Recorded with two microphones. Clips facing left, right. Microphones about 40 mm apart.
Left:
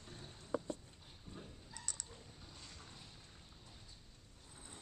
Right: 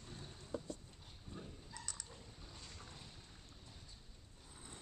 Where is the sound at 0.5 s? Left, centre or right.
Left.